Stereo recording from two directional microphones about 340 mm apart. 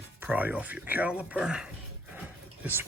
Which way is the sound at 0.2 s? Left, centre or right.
Centre.